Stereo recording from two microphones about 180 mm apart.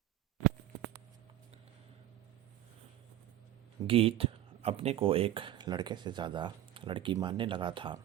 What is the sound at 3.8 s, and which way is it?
Speech, 30° right (ahead or behind).